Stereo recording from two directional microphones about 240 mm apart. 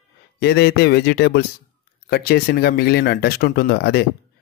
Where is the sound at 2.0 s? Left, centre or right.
Left.